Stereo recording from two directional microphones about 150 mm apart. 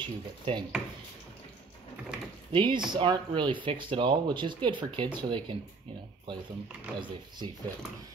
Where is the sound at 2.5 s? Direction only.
35° right (ahead or behind).